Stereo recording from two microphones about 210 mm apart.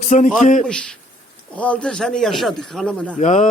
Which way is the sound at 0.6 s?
5° left (ahead or behind).